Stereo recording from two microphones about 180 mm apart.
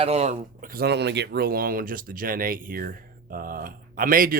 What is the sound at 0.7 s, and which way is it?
Speech, 65° right (ahead or behind).